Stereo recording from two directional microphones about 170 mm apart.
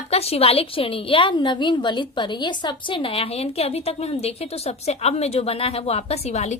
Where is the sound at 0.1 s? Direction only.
35° left (ahead or behind).